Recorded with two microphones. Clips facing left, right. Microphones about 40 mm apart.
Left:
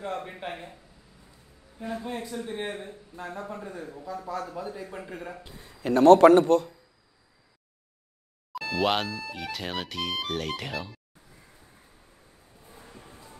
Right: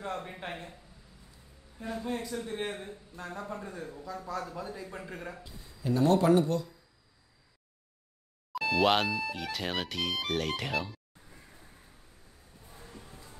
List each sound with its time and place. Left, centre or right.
0.0 s speech: centre
1.8 s speech: centre
3.3 s speech: centre
4.9 s speech: centre
5.4 s a man's voice: left
8.5 s speech: centre
12.6 s music: centre
12.9 s music: left